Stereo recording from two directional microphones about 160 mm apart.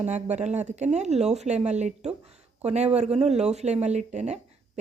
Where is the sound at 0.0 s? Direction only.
45° right (ahead or behind).